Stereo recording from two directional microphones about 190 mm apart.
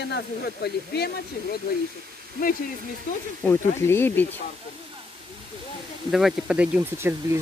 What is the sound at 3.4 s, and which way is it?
Speech, 10° left (ahead or behind).